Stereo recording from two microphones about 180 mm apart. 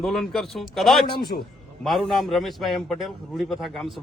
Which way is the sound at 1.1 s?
55° left (ahead or behind).